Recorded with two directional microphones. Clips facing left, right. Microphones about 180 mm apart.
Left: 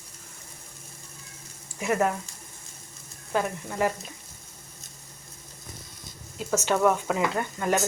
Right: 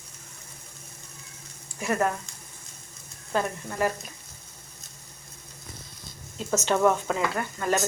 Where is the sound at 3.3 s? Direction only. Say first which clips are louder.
Even; 15° left (ahead or behind).